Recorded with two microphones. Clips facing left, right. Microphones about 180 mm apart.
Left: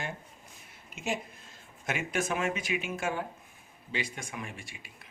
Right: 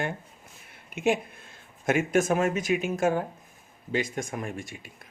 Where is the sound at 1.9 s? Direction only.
45° right (ahead or behind).